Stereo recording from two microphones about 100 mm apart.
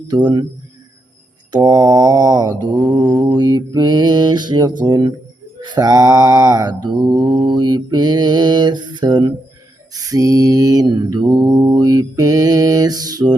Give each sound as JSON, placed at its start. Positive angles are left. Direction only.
{"t": 0.1, "sound": "mantra", "side_deg": -45}
{"t": 1.5, "sound": "mantra", "side_deg": -40}
{"t": 9.9, "sound": "mantra", "side_deg": -35}